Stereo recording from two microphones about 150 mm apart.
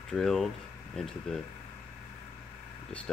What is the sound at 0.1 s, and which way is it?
Speech, 5° left (ahead or behind).